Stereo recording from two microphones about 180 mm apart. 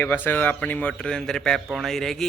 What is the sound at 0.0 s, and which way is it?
A man's voice, 10° left (ahead or behind).